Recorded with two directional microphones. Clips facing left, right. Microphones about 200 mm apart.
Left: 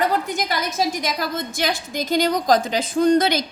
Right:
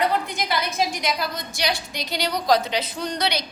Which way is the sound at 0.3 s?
45° left (ahead or behind).